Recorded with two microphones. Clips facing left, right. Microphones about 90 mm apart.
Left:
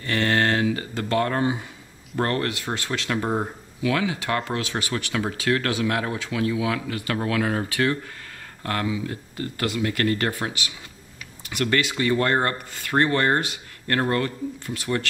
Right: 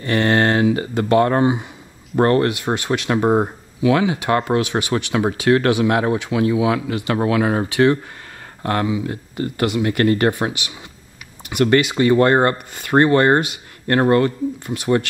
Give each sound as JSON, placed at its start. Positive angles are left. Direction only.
{"t": 0.0, "sound": "speech", "side_deg": -20}